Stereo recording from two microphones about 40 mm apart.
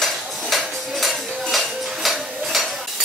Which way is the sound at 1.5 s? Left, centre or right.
Centre.